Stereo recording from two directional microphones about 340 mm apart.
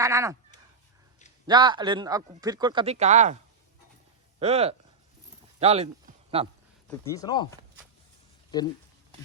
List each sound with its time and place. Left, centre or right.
0.0 s speech: centre
1.5 s speech: centre
4.4 s speech: centre
6.9 s speech: centre